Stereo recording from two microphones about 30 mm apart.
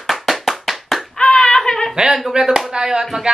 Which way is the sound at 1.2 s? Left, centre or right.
Left.